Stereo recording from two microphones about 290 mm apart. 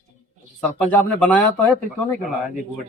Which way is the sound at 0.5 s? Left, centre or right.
Centre.